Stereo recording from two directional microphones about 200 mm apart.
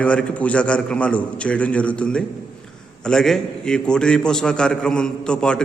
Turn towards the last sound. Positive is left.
turn(degrees=5)  # may be behind; listen again after turning